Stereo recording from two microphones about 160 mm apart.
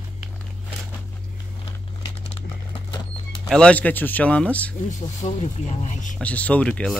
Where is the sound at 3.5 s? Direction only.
5° left (ahead or behind).